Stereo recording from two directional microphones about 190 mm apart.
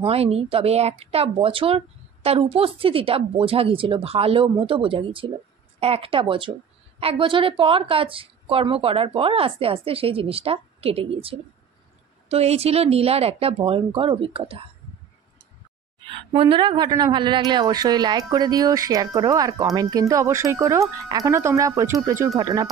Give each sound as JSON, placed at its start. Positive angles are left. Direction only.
{"t": 0.0, "sound": "a woman's voice", "side_deg": -30}
{"t": 16.0, "sound": "a woman's voice", "side_deg": -25}